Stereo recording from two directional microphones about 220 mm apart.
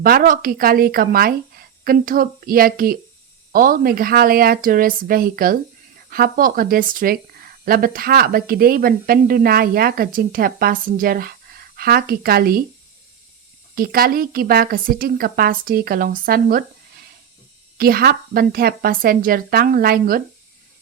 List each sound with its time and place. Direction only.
0.0 s a woman's voice: 40° right (ahead or behind)
13.7 s speech: 40° right (ahead or behind)
17.7 s a woman's voice: 45° right (ahead or behind)